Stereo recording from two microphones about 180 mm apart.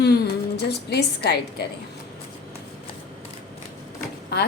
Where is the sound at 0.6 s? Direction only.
65° left (ahead or behind).